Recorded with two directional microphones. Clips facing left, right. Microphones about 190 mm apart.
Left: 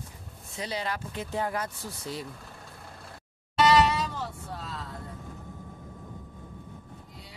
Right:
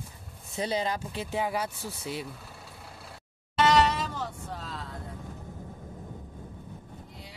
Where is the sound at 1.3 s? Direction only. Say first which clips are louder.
Right 1 dB; 10° right (ahead or behind).